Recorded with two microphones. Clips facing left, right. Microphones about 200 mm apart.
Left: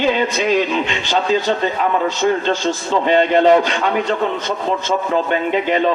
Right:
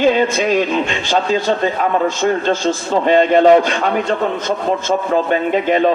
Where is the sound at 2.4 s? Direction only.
40° right (ahead or behind).